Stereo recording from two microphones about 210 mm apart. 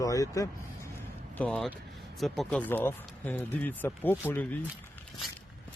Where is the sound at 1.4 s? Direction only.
Centre (ahead or behind).